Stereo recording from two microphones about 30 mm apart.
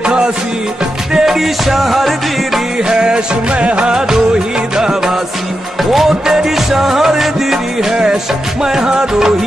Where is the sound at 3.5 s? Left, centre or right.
Right.